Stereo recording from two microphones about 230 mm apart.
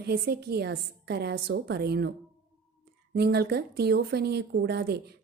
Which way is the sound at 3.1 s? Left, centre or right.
Right.